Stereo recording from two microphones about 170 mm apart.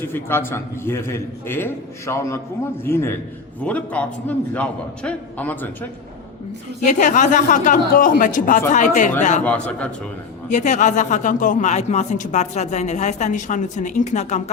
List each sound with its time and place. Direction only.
0.0 s a man's voice: 15° left (ahead or behind)
6.8 s a man's voice: 50° left (ahead or behind)
9.4 s a man's voice: 5° left (ahead or behind)
10.5 s a man's voice: 45° left (ahead or behind)